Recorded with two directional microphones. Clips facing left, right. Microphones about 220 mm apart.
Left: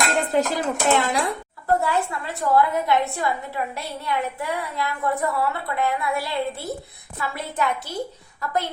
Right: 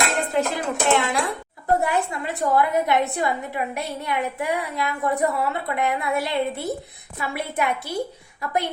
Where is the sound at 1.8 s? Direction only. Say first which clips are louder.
Right 1 dB; 15° right (ahead or behind).